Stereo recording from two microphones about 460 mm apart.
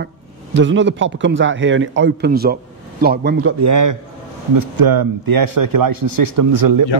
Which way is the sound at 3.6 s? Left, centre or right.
Right.